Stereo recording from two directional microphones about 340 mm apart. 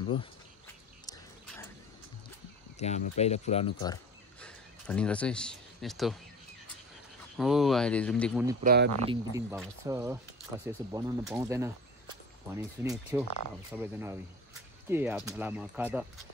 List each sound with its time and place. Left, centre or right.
1.0 s a sound: centre
2.8 s speech: centre
7.3 s speech: centre
8.6 s speech: right
9.1 s speech: centre